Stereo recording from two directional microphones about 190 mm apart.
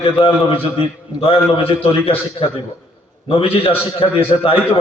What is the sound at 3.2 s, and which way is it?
A man's voice, 30° left (ahead or behind).